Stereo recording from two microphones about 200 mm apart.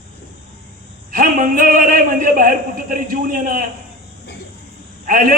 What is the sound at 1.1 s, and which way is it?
A man's voice, 45° right (ahead or behind).